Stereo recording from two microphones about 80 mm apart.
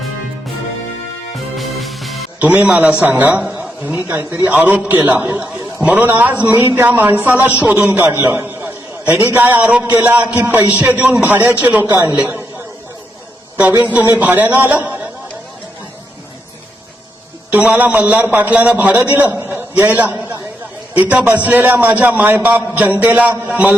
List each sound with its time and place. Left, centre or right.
1.5 s music: centre
2.4 s a man's voice: right
13.7 s a man's voice: right
17.5 s a man's voice: centre